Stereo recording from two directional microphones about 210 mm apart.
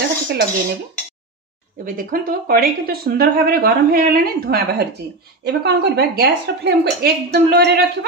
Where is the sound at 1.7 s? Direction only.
40° right (ahead or behind).